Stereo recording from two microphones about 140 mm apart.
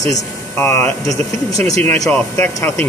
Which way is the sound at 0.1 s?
20° left (ahead or behind).